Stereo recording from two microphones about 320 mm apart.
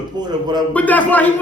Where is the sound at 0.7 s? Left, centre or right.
Centre.